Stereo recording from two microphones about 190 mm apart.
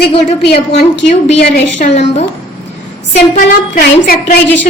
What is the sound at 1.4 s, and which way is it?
Speech, 60° left (ahead or behind).